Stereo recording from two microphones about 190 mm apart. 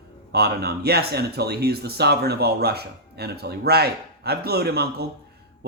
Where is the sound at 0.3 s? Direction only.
55° right (ahead or behind).